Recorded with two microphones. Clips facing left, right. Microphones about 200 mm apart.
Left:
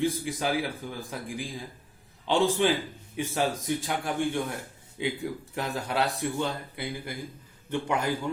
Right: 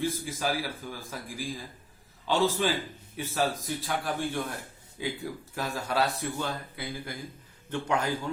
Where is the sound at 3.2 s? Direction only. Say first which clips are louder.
Left 1 dB; 15° left (ahead or behind).